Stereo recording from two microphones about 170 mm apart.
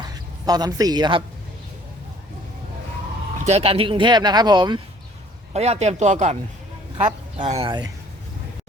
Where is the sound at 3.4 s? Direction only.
35° right (ahead or behind).